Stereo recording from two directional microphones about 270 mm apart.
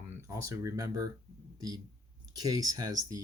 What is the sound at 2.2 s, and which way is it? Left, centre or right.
Speech, centre.